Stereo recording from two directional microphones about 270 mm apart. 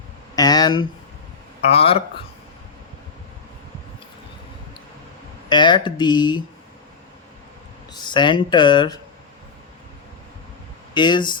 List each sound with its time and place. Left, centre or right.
0.3 s speech: centre
5.5 s speech: centre
7.9 s speech: centre
10.9 s speech: centre